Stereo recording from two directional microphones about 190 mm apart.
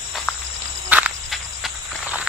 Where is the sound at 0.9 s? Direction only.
5° right (ahead or behind).